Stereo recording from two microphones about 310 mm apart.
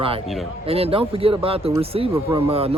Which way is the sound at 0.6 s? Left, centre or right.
Centre.